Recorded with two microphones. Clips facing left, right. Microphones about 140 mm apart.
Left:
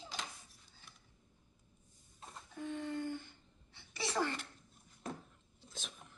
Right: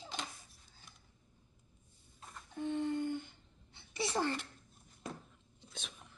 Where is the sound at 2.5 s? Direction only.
25° right (ahead or behind).